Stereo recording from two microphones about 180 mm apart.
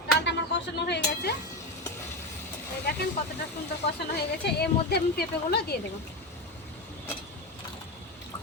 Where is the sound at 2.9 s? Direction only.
60° left (ahead or behind).